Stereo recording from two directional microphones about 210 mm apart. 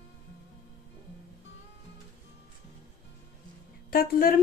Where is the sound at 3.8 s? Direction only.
45° left (ahead or behind).